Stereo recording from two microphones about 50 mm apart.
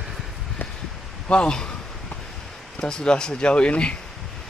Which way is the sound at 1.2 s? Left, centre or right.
Left.